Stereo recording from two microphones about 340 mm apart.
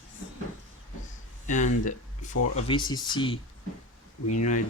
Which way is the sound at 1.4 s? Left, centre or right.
Left.